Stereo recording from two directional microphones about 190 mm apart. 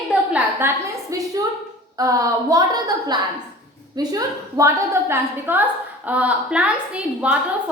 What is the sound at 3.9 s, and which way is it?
A woman's voice, 20° right (ahead or behind).